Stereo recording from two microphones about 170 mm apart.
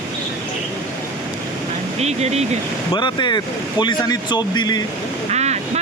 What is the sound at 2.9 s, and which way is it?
Speech, 25° left (ahead or behind).